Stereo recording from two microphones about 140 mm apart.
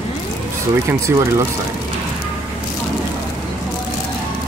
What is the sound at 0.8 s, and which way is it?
Speech, 20° right (ahead or behind).